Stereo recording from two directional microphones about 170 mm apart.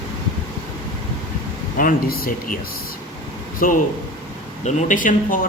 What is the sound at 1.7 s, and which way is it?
Speech, 55° left (ahead or behind).